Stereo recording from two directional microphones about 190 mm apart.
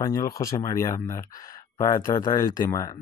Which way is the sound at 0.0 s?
15° left (ahead or behind).